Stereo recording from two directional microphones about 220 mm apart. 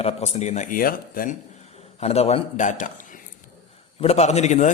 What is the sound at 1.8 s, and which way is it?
A man's voice, 30° left (ahead or behind).